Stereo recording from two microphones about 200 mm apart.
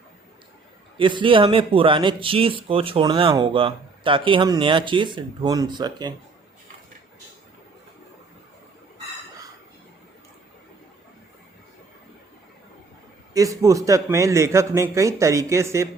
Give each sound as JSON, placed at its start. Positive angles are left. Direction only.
{"t": 0.9, "sound": "speech", "side_deg": -25}
{"t": 13.3, "sound": "a man's voice", "side_deg": -15}